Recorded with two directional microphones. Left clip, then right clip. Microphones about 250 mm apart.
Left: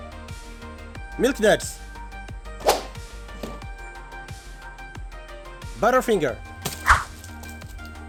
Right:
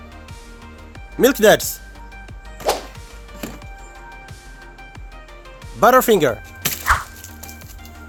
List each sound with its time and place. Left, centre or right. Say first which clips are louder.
1.2 s speech: right 7 dB; centre
2.6 s whip: even; centre
5.8 s speech: right 7 dB; centre
6.8 s a sound: even; centre